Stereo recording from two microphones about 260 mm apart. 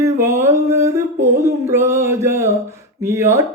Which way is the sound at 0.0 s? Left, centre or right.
Centre.